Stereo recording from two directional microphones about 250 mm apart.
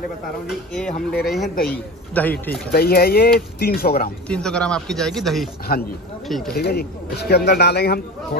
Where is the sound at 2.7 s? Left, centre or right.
Left.